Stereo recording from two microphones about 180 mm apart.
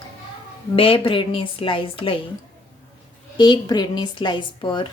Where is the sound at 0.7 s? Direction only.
30° left (ahead or behind).